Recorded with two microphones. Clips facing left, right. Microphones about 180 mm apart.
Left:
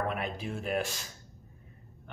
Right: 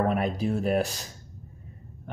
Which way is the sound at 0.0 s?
40° right (ahead or behind).